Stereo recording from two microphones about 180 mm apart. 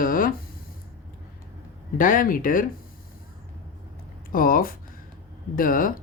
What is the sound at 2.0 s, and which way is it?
Speech, 50° left (ahead or behind).